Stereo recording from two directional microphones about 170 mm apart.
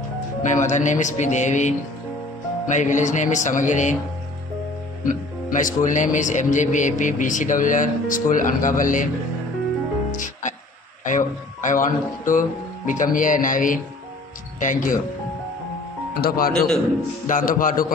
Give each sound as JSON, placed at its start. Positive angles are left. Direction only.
{"t": 0.4, "sound": "speech", "side_deg": 45}
{"t": 5.0, "sound": "speech", "side_deg": 50}
{"t": 10.1, "sound": "music", "side_deg": 50}
{"t": 11.1, "sound": "speech", "side_deg": 50}
{"t": 16.2, "sound": "speech", "side_deg": 60}
{"t": 16.5, "sound": "a man's voice", "side_deg": 5}
{"t": 17.3, "sound": "speech", "side_deg": 55}